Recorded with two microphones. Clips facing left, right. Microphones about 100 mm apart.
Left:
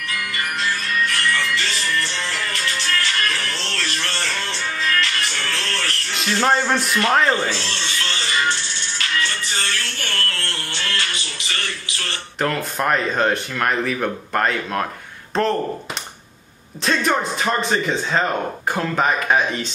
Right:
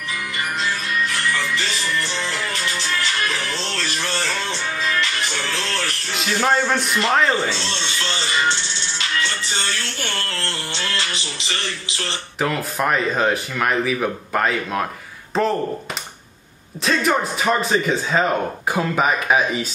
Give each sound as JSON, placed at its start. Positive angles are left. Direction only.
{"t": 1.0, "sound": "music", "side_deg": -15}
{"t": 6.1, "sound": "a man's voice", "side_deg": 0}
{"t": 7.6, "sound": "music", "side_deg": -25}
{"t": 9.9, "sound": "music", "side_deg": -25}
{"t": 12.4, "sound": "speech", "side_deg": -5}
{"t": 16.8, "sound": "speech", "side_deg": -5}